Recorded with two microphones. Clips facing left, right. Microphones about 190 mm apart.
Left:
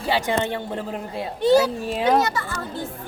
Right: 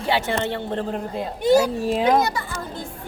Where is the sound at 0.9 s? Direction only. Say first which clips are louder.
Right 2 dB; 5° left (ahead or behind).